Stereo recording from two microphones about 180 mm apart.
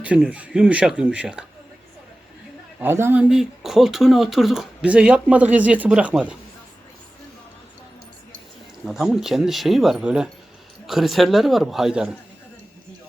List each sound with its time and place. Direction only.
0.0 s speech: 5° right (ahead or behind)
2.8 s speech: 10° right (ahead or behind)
8.9 s speech: centre (ahead or behind)